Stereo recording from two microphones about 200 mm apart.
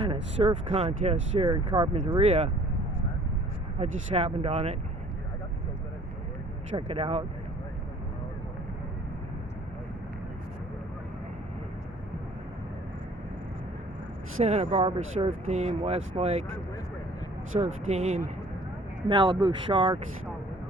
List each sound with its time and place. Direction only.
0.0 s speech: 25° right (ahead or behind)
1.5 s speech: 20° right (ahead or behind)
3.8 s speech: 30° right (ahead or behind)
6.7 s speech: 25° right (ahead or behind)
14.4 s speech: 35° right (ahead or behind)
17.8 s speech: 35° right (ahead or behind)